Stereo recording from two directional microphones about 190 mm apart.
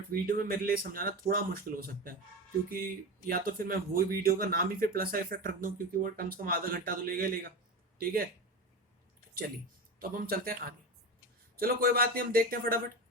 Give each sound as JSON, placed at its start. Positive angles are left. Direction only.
{"t": 0.1, "sound": "speech", "side_deg": -50}
{"t": 3.2, "sound": "speech", "side_deg": -50}
{"t": 10.0, "sound": "speech", "side_deg": -50}